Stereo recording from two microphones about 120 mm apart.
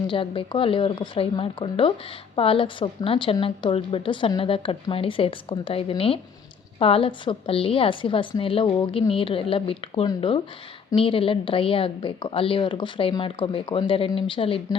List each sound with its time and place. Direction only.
0.1 s a woman's voice: 45° left (ahead or behind)